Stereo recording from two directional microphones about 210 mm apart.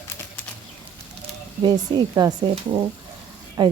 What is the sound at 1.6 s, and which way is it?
A woman's voice, 20° right (ahead or behind).